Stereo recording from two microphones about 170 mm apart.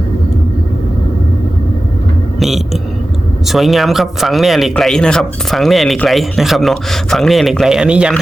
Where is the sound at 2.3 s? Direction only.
Centre (ahead or behind).